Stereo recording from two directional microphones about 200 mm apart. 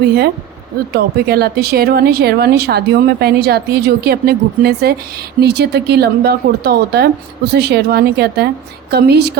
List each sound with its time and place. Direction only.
0.9 s speech: 50° right (ahead or behind)